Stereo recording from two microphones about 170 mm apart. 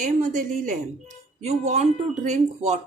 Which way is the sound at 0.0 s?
50° right (ahead or behind).